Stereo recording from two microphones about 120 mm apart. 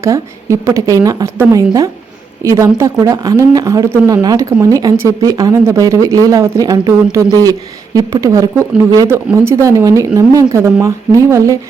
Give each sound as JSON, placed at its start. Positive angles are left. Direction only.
{"t": 0.0, "sound": "a woman's voice", "side_deg": -25}